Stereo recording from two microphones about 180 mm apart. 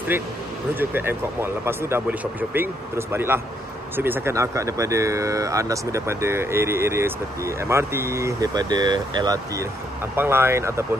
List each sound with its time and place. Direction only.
0.7 s speech: 10° right (ahead or behind)